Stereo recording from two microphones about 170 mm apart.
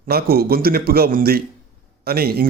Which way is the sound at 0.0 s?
65° right (ahead or behind).